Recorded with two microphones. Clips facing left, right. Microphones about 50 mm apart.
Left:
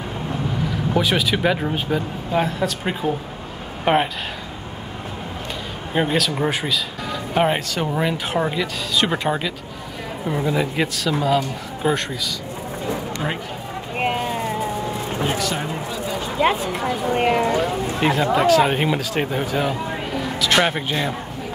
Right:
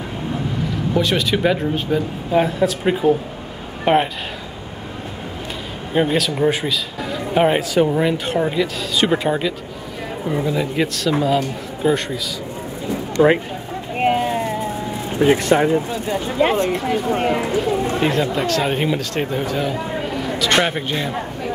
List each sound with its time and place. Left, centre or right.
0.9 s speech: centre
5.9 s speech: centre
13.2 s speech: centre
13.9 s a sound: centre
15.3 s speech: right
16.4 s speech: centre